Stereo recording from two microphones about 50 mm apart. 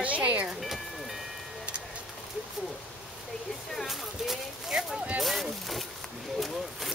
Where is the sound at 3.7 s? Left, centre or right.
Centre.